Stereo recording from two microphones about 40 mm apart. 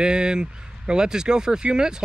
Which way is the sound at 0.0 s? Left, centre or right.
Right.